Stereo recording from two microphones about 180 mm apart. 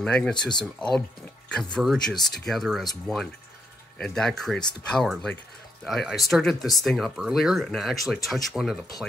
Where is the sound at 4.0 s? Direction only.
Centre (ahead or behind).